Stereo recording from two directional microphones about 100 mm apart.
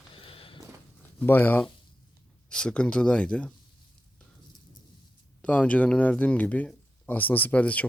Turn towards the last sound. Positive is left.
turn(degrees=15)  # may be behind; listen again after turning